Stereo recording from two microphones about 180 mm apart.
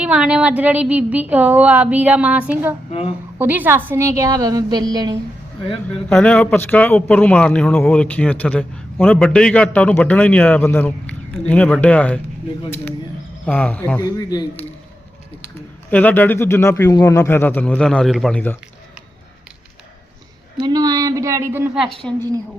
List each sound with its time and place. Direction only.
0.0 s a woman's voice: 5° right (ahead or behind)
2.9 s a woman's voice: 35° left (ahead or behind)
3.3 s a woman's voice: 10° right (ahead or behind)
6.1 s a man's voice: 5° left (ahead or behind)
13.4 s a man's voice: 5° left (ahead or behind)
14.2 s a man's voice: 20° left (ahead or behind)
15.9 s a man's voice: 10° left (ahead or behind)
20.6 s speech: 25° right (ahead or behind)
22.0 s a man's voice: 5° left (ahead or behind)